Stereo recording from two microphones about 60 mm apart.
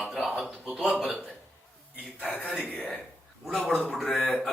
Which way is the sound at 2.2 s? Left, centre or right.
Left.